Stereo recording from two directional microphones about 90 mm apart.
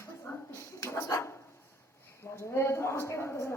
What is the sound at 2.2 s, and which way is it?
A woman's voice, 30° left (ahead or behind).